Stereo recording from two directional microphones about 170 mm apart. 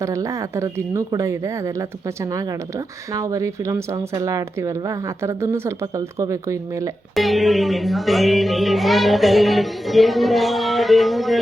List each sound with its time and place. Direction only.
0.0 s speech: 20° right (ahead or behind)
7.2 s music: centre (ahead or behind)